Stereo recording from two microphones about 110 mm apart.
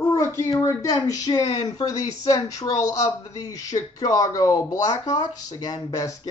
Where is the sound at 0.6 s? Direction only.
30° left (ahead or behind).